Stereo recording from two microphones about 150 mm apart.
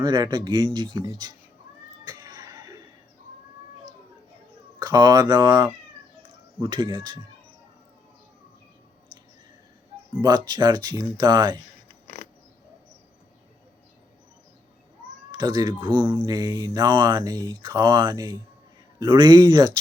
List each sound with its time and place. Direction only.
0.0 s speech: 30° right (ahead or behind)
2.0 s a sound: 25° right (ahead or behind)
4.8 s speech: 25° right (ahead or behind)
10.2 s speech: 25° right (ahead or behind)
12.0 s a sound: 60° left (ahead or behind)
15.3 s speech: 30° right (ahead or behind)